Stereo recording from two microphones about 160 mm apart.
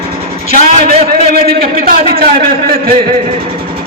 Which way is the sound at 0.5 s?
55° right (ahead or behind).